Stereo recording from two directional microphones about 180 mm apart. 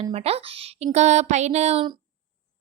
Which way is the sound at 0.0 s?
35° right (ahead or behind).